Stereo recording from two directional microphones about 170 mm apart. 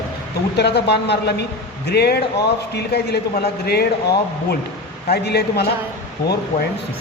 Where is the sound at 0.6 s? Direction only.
75° left (ahead or behind).